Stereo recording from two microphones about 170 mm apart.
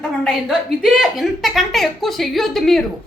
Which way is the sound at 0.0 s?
Centre (ahead or behind).